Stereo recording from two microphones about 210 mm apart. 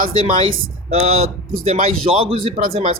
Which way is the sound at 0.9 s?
30° right (ahead or behind).